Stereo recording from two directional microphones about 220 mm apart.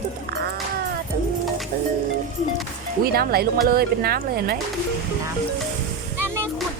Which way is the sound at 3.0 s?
45° right (ahead or behind).